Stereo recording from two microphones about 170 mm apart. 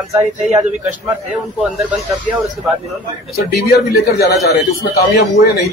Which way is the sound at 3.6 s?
65° left (ahead or behind).